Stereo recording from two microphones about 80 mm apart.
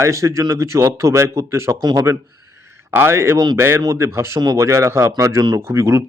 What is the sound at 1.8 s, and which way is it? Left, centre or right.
Speech, right.